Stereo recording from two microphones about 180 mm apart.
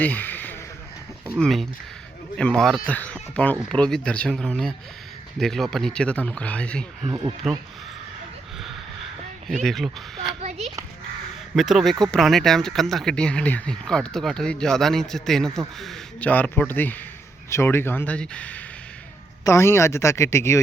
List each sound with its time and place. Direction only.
0.0 s a sound: 10° left (ahead or behind)
1.4 s speech: centre (ahead or behind)
9.6 s speech: centre (ahead or behind)
11.5 s speech: centre (ahead or behind); by 20.6 s 15° left (ahead or behind)